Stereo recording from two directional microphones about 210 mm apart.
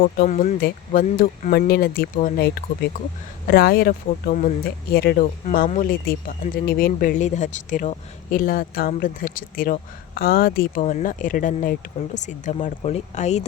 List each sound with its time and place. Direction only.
0.0 s speech: 45° left (ahead or behind)
5.2 s speech: 35° left (ahead or behind)